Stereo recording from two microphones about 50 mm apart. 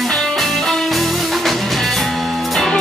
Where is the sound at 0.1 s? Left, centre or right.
Centre.